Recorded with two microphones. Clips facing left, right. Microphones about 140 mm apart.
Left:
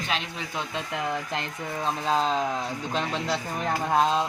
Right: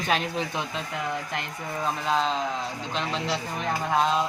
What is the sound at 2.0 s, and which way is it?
Speech, 40° left (ahead or behind).